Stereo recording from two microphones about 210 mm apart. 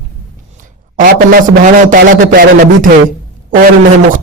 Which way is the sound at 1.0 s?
40° right (ahead or behind).